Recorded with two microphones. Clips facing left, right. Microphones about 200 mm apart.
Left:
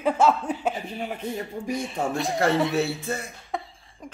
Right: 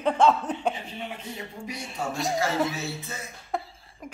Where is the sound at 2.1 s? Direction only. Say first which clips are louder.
Left 1 dB; centre (ahead or behind).